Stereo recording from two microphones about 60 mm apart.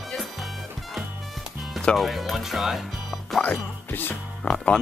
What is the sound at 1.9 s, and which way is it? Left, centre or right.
Speech, centre.